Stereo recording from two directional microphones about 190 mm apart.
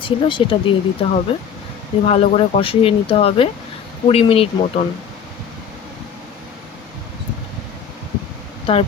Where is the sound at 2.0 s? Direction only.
30° left (ahead or behind).